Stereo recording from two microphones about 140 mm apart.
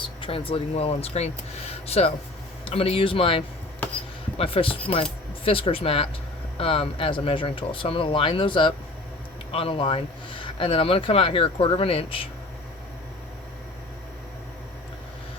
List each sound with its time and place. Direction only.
0.2 s speech: 40° left (ahead or behind)